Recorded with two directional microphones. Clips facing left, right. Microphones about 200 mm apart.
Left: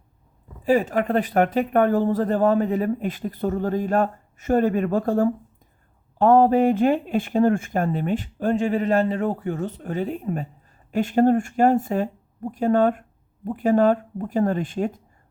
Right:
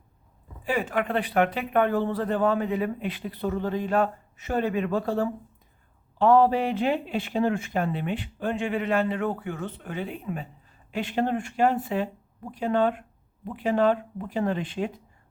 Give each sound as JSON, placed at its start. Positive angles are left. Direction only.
{"t": 0.6, "sound": "speech", "side_deg": 40}